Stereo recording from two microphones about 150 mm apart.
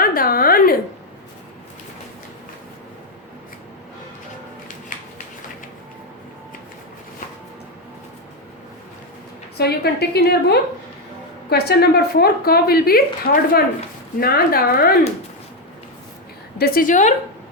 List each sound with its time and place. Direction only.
0.0 s a sound: 75° left (ahead or behind)
9.6 s a woman's voice: 90° left
14.2 s speech: 90° left
16.6 s a woman's voice: 70° left (ahead or behind)